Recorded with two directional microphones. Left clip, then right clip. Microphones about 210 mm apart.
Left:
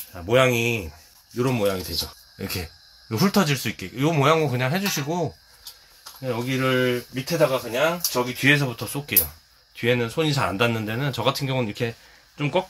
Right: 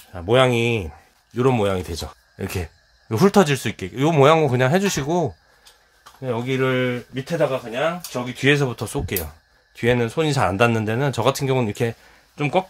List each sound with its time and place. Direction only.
0.1 s speech: 50° right (ahead or behind)